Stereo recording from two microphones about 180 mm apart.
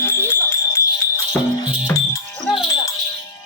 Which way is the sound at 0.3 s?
15° left (ahead or behind).